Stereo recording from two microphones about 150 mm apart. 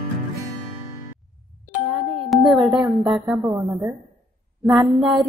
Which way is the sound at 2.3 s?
Centre (ahead or behind).